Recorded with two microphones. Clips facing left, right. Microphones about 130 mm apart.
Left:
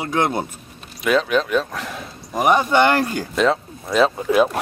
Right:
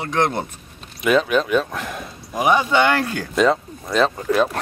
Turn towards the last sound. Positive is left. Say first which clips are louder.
# left 2 dB
turn(degrees=5)  # may be behind; listen again after turning